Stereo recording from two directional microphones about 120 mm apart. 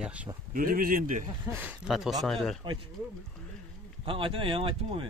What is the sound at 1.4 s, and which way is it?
Speech, 15° right (ahead or behind).